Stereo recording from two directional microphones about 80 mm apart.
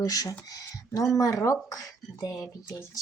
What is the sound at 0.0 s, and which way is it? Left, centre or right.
Speech, left.